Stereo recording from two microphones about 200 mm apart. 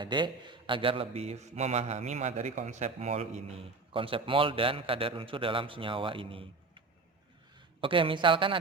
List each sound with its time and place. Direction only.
0.0 s a man's voice: 25° right (ahead or behind)
7.8 s a man's voice: 25° right (ahead or behind)